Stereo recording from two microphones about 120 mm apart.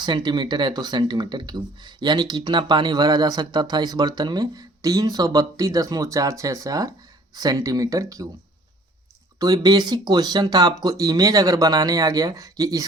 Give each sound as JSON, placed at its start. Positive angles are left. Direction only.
{"t": 0.0, "sound": "speech", "side_deg": -40}
{"t": 9.4, "sound": "speech", "side_deg": -35}